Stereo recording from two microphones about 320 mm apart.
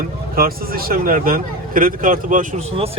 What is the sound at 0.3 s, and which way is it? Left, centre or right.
Speech, right.